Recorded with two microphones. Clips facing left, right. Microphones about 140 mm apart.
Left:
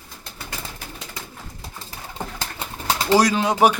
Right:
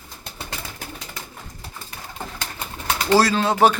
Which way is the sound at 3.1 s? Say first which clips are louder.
Even; 15° left (ahead or behind).